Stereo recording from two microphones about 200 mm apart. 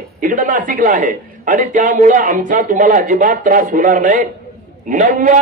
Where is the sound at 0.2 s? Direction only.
40° right (ahead or behind).